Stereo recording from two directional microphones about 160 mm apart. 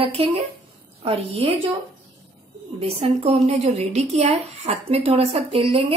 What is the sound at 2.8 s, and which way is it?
Speech, 40° right (ahead or behind).